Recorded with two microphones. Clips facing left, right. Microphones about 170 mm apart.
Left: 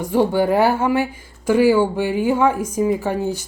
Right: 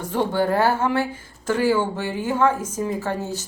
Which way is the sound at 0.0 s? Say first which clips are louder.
Left 5 dB; 10° left (ahead or behind).